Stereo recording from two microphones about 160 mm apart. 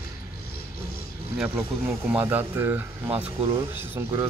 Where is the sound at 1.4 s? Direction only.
5° right (ahead or behind).